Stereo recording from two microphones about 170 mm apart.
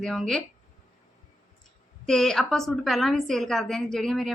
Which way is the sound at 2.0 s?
5° left (ahead or behind).